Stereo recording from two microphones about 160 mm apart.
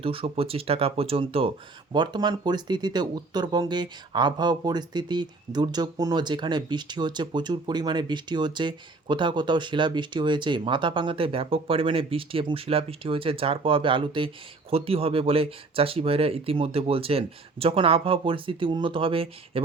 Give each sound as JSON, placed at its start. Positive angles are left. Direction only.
{"t": 0.0, "sound": "speech", "side_deg": -35}